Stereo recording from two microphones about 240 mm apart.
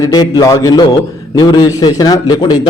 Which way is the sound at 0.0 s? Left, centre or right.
Centre.